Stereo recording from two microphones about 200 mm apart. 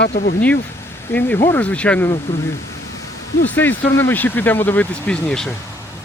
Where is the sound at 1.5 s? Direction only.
10° left (ahead or behind).